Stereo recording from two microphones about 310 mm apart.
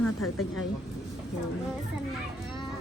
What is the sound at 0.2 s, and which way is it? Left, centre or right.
Speech, left.